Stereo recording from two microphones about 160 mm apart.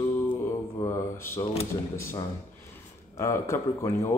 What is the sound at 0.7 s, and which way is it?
Speech, 15° left (ahead or behind).